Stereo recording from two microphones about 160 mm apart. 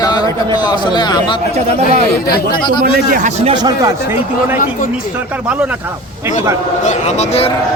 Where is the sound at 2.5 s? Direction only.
30° left (ahead or behind).